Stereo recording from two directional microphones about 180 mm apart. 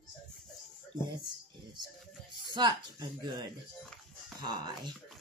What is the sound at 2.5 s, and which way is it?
Speech, 25° right (ahead or behind).